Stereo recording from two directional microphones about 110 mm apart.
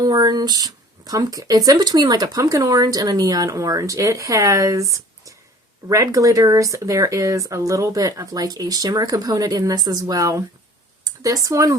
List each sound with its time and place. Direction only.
0.0 s speech: 35° right (ahead or behind)